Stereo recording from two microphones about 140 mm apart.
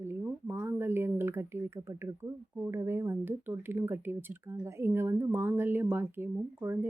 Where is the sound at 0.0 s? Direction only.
15° right (ahead or behind).